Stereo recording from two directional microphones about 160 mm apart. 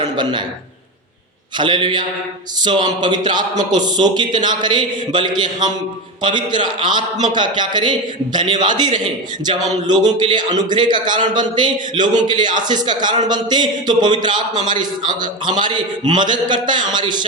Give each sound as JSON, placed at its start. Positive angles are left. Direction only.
{"t": 0.2, "sound": "a man's voice", "side_deg": -30}
{"t": 1.5, "sound": "a man's voice", "side_deg": -30}